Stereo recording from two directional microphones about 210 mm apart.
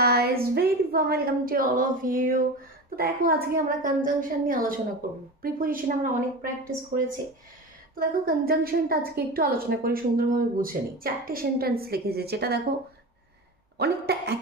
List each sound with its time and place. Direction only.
0.0 s a woman's voice: 50° right (ahead or behind)
7.9 s a woman's voice: 45° right (ahead or behind)
13.7 s a woman's voice: 50° right (ahead or behind)